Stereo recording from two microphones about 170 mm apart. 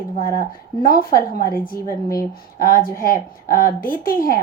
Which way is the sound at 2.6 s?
55° left (ahead or behind).